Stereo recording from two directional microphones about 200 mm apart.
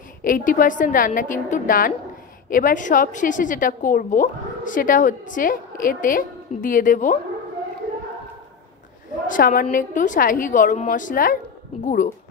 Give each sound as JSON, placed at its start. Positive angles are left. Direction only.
{"t": 0.2, "sound": "a woman's voice", "side_deg": 45}
{"t": 9.3, "sound": "a woman's voice", "side_deg": 45}